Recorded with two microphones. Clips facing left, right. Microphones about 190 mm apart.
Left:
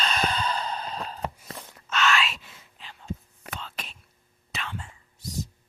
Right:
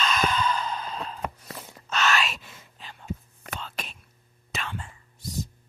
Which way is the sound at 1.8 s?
40° right (ahead or behind).